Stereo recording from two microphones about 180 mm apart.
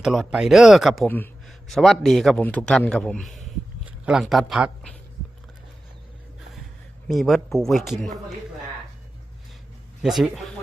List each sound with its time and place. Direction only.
0.0 s a man's voice: centre (ahead or behind)
1.0 s a man's voice: 10° left (ahead or behind)
7.1 s a man's voice: centre (ahead or behind)
10.0 s a man's voice: centre (ahead or behind)